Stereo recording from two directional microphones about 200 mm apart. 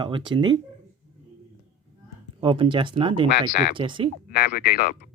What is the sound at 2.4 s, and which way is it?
Speech, 25° right (ahead or behind).